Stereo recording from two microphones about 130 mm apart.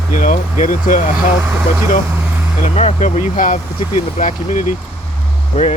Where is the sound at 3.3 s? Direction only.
80° left.